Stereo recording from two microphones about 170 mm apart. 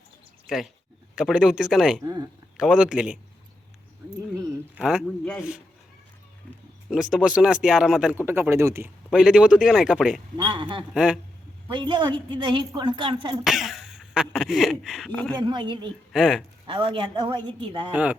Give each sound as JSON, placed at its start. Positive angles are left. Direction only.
{"t": 0.4, "sound": "speech", "side_deg": 0}
{"t": 4.8, "sound": "speech", "side_deg": 0}
{"t": 6.9, "sound": "speech", "side_deg": -5}
{"t": 9.0, "sound": "speech", "side_deg": -5}
{"t": 10.3, "sound": "speech", "side_deg": -25}
{"t": 10.9, "sound": "speech", "side_deg": -5}
{"t": 11.7, "sound": "speech", "side_deg": -30}
{"t": 13.4, "sound": "speech", "side_deg": 0}
{"t": 15.4, "sound": "speech", "side_deg": -25}
{"t": 16.1, "sound": "speech", "side_deg": -5}
{"t": 16.6, "sound": "speech", "side_deg": -30}
{"t": 17.9, "sound": "speech", "side_deg": -10}